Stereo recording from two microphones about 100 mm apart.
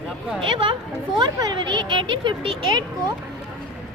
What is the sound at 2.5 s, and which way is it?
Speech, 55° right (ahead or behind).